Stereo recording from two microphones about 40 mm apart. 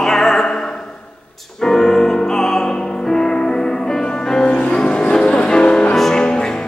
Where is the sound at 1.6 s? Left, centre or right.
Centre.